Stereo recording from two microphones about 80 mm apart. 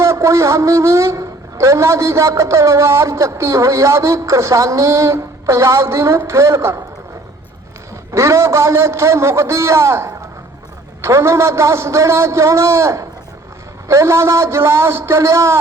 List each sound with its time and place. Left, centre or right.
0.0 s a woman's voice: right
8.1 s a woman's voice: right